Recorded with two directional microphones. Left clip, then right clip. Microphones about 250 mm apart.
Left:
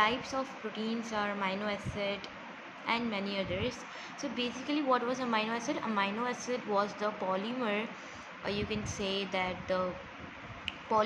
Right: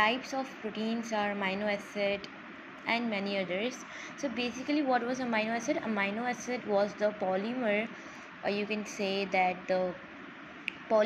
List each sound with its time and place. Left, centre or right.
0.0 s a woman's voice: centre
2.9 s a woman's voice: centre
10.6 s a sound: centre